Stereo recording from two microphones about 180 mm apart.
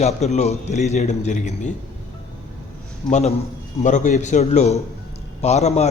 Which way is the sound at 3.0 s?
40° left (ahead or behind).